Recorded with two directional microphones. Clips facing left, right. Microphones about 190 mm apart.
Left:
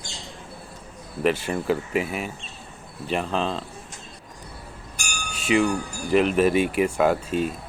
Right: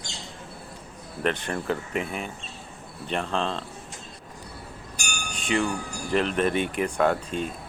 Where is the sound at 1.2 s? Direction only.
5° left (ahead or behind).